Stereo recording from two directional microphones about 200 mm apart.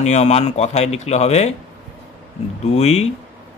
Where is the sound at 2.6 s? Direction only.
30° left (ahead or behind).